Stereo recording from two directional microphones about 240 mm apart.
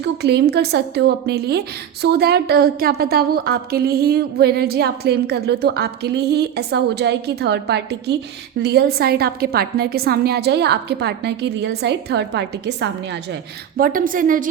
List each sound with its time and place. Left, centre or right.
0.0 s a woman's voice: right